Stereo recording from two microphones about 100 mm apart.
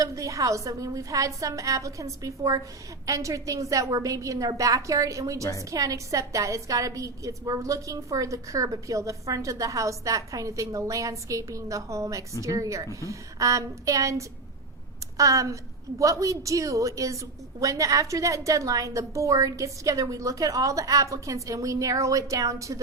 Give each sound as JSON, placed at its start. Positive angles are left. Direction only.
{"t": 0.0, "sound": "a woman's voice", "side_deg": -35}